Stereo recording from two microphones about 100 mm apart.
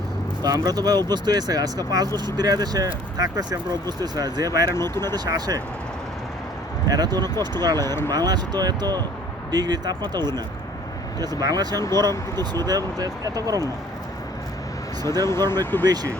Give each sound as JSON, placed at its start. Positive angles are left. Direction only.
{"t": 0.4, "sound": "speech", "side_deg": -40}
{"t": 4.7, "sound": "speech", "side_deg": 25}
{"t": 5.1, "sound": "speech", "side_deg": -40}
{"t": 6.8, "sound": "speech", "side_deg": -40}
{"t": 11.8, "sound": "speech", "side_deg": 30}
{"t": 12.0, "sound": "speech", "side_deg": -40}
{"t": 15.2, "sound": "speech", "side_deg": 25}
{"t": 15.8, "sound": "speech", "side_deg": -40}